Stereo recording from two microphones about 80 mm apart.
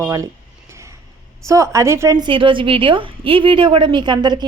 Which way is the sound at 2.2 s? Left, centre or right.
Right.